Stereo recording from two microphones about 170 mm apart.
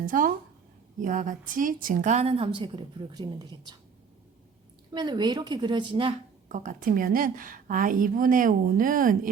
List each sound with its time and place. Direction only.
0.0 s a woman's voice: 55° right (ahead or behind); by 3.8 s 25° right (ahead or behind)
4.9 s a woman's voice: 25° right (ahead or behind)
6.5 s a woman's voice: 45° right (ahead or behind)